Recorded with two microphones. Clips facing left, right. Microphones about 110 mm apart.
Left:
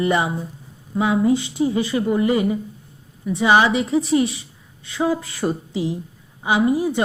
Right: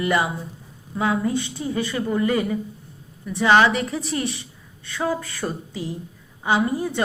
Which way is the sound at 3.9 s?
20° left (ahead or behind).